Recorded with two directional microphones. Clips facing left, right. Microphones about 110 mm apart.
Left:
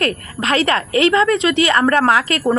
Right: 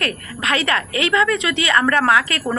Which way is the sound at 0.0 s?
30° left (ahead or behind).